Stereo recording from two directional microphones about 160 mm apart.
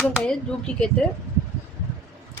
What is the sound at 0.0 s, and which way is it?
Speech, 5° left (ahead or behind).